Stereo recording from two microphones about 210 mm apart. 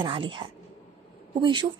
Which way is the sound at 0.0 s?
25° right (ahead or behind).